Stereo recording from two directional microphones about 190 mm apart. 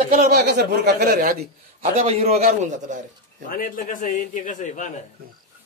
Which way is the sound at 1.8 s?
30° right (ahead or behind).